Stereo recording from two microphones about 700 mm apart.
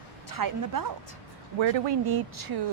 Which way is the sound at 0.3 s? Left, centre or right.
Right.